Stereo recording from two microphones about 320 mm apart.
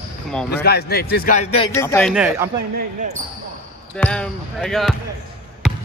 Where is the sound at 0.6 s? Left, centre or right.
Left.